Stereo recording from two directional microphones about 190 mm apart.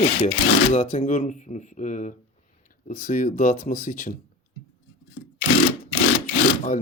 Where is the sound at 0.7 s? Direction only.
35° left (ahead or behind).